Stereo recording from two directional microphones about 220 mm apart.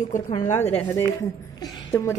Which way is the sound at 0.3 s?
30° left (ahead or behind).